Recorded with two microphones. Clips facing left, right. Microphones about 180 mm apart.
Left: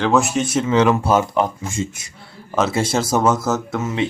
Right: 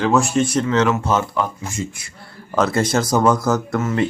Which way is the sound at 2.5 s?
5° left (ahead or behind).